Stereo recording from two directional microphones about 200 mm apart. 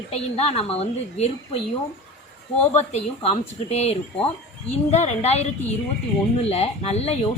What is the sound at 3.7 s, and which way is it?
A woman's voice, 30° left (ahead or behind).